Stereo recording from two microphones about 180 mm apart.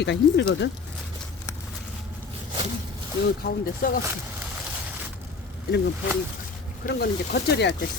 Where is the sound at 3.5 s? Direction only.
55° left (ahead or behind).